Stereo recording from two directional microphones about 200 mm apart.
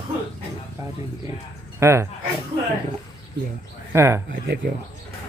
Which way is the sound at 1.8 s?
15° right (ahead or behind).